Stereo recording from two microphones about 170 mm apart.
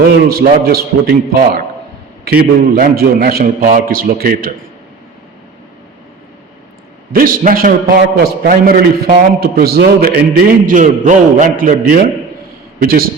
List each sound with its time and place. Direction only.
0.3 s a man's voice: 60° right (ahead or behind)
2.6 s a man's voice: 60° right (ahead or behind)
7.1 s a man's voice: 55° right (ahead or behind)